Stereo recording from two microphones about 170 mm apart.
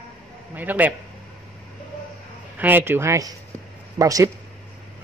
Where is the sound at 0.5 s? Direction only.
10° right (ahead or behind).